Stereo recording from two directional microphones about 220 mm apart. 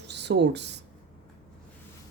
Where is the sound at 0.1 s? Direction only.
50° right (ahead or behind).